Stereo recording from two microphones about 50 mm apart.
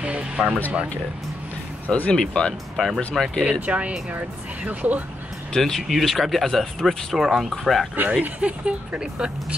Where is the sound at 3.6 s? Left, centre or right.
Right.